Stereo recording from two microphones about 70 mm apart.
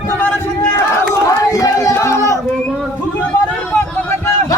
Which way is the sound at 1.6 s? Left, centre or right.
Left.